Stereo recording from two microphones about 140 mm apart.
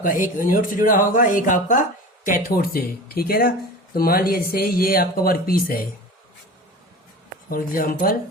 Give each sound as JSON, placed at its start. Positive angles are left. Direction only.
{"t": 0.0, "sound": "speech", "side_deg": 75}
{"t": 2.2, "sound": "speech", "side_deg": 85}
{"t": 7.5, "sound": "speech", "side_deg": 90}